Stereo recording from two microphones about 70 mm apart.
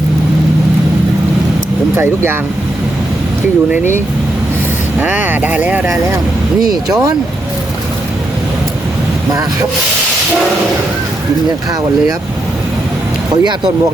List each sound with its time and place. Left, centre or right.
4.9 s speech: right
6.8 s speech: right
13.3 s speech: right